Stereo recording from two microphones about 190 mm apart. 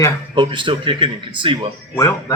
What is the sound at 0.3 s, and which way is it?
Speech, 25° right (ahead or behind).